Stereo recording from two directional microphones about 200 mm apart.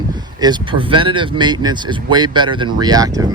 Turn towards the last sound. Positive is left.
turn(degrees=-20)  # may be behind; listen again after turning